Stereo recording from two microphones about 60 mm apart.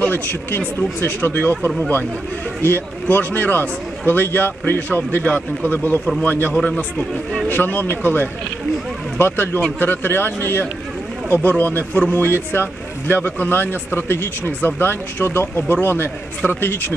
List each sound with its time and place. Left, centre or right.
0.0 s a man's voice: left
6.5 s speech: centre
7.4 s a man's voice: left